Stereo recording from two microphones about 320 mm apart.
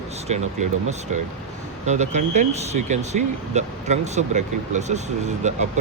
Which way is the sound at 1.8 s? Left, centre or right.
Right.